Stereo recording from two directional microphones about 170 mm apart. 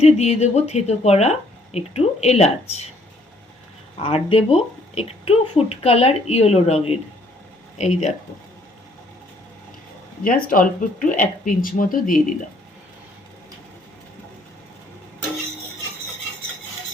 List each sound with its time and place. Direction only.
0.0 s speech: 40° left (ahead or behind)
4.0 s speech: 35° left (ahead or behind)
10.4 s speech: 55° left (ahead or behind)